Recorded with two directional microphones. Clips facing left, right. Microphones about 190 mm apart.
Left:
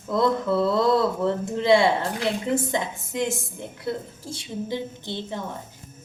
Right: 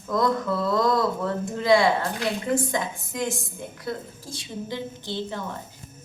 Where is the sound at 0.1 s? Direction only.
25° left (ahead or behind).